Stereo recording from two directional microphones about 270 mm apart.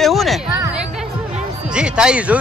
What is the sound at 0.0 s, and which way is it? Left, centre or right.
Music, centre.